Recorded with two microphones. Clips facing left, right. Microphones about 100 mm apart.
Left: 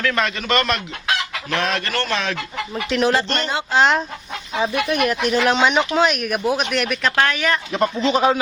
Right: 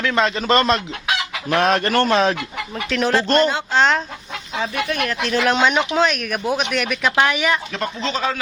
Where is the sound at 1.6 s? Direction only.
45° right (ahead or behind).